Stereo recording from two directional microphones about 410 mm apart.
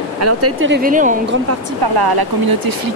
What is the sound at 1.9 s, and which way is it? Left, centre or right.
Speech, right.